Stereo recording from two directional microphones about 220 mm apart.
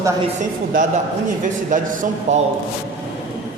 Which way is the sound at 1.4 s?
35° right (ahead or behind).